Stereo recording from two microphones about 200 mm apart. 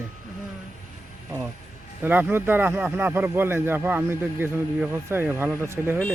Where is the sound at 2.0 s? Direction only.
10° right (ahead or behind).